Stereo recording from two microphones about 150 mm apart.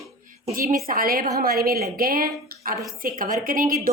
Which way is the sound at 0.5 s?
70° right (ahead or behind).